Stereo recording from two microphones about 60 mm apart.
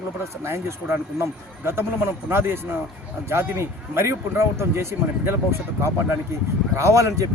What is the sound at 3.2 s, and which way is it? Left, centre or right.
Speech, right.